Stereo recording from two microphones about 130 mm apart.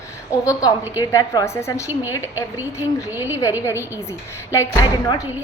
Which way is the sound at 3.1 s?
15° right (ahead or behind).